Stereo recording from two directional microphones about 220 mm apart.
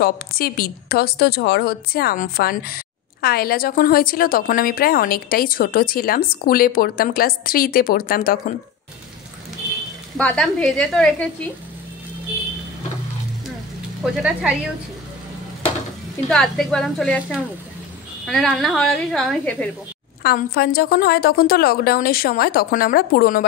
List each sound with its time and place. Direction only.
0.0 s a woman's voice: 45° left (ahead or behind)
10.1 s speech: 5° left (ahead or behind)
14.0 s speech: centre (ahead or behind)
16.3 s speech: centre (ahead or behind)
20.2 s a woman's voice: 45° left (ahead or behind)